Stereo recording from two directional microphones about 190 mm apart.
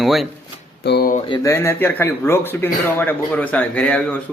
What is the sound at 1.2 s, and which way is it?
Speech, 20° left (ahead or behind).